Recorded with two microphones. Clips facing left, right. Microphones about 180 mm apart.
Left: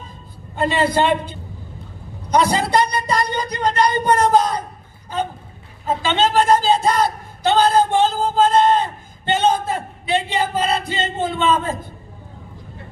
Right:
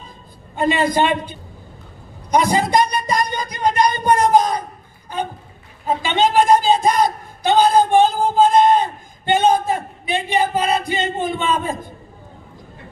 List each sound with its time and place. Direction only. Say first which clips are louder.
0.5 s speech: right 1 dB; 15° right (ahead or behind)
6.0 s a man's voice: right 1 dB; 15° right (ahead or behind)